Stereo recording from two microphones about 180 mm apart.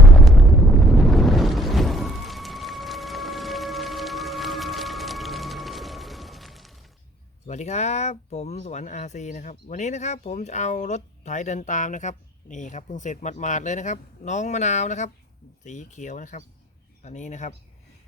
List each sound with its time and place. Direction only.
0.2 s boat: centre (ahead or behind)
7.4 s speech: 40° left (ahead or behind)